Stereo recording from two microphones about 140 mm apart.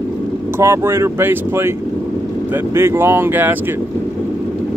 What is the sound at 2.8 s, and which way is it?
Speech, 20° right (ahead or behind).